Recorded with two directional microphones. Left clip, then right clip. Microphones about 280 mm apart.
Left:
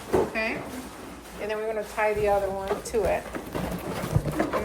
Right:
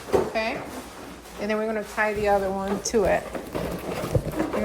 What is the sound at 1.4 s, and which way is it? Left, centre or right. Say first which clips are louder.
Speech: right 3 dB; right.